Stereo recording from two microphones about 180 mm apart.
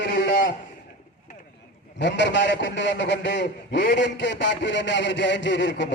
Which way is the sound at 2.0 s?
80° left.